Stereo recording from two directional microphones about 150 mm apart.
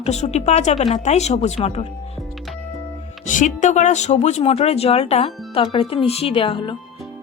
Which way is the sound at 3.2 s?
55° left (ahead or behind).